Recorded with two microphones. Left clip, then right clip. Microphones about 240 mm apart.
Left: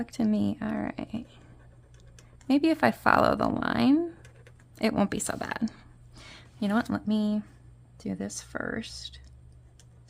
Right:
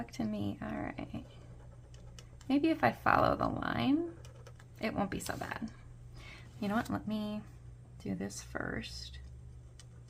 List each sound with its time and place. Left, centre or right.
0.0 s speech: left
2.5 s speech: left
4.8 s a sound: left
6.9 s speech: left